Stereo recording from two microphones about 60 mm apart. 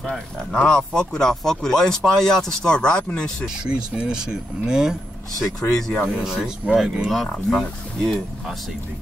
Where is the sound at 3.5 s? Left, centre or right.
Centre.